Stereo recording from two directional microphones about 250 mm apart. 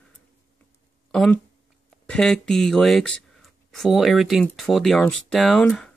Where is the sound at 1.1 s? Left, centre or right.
Centre.